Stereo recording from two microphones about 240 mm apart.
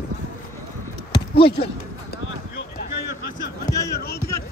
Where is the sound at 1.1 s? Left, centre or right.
Centre.